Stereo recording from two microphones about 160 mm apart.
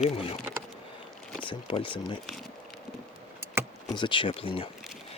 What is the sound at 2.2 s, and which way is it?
Speech, centre (ahead or behind).